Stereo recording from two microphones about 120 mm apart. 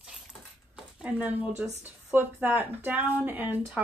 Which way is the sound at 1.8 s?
15° right (ahead or behind).